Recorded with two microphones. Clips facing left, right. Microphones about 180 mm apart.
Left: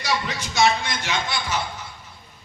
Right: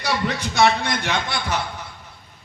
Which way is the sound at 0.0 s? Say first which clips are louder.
Right 3 dB; 60° right (ahead or behind).